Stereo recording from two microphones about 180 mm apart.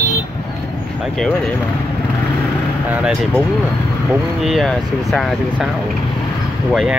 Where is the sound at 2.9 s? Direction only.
5° right (ahead or behind).